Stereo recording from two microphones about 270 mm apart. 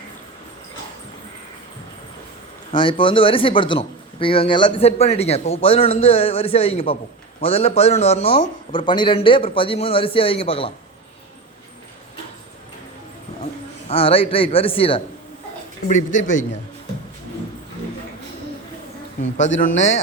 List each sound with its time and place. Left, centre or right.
2.7 s speech: centre
13.4 s a man's voice: left
19.5 s speech: left